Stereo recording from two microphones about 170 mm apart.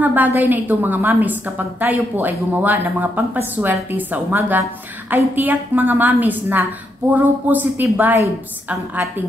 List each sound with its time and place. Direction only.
0.0 s a woman's voice: 10° right (ahead or behind)